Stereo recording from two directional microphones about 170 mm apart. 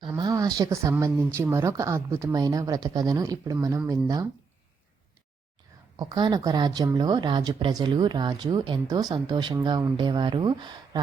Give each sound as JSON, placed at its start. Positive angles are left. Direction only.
{"t": 0.1, "sound": "a woman's voice", "side_deg": -20}
{"t": 6.0, "sound": "a woman's voice", "side_deg": -25}